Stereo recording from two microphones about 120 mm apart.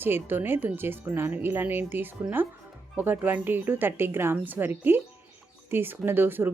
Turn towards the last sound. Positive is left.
turn(degrees=-15)  # may be behind; listen again after turning